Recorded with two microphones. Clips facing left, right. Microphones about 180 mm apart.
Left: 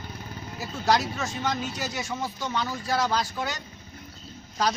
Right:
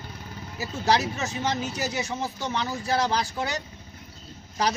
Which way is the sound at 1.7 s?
10° right (ahead or behind).